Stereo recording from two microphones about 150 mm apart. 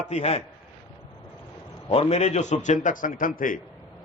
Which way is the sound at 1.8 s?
40° left (ahead or behind).